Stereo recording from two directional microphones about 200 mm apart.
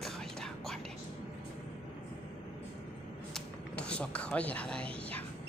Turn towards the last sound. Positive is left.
turn(degrees=5)  # may be behind; listen again after turning